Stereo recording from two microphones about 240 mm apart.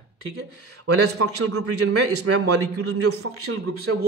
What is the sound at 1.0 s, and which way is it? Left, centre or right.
A man's voice, right.